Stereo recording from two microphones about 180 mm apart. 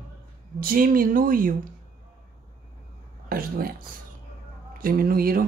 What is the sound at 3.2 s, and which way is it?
Speech, 55° right (ahead or behind).